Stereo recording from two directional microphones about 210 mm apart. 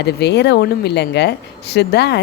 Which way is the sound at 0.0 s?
55° left (ahead or behind).